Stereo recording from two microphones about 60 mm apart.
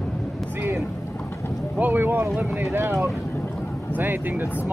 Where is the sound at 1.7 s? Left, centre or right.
Right.